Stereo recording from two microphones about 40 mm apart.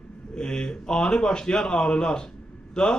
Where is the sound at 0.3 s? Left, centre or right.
Left.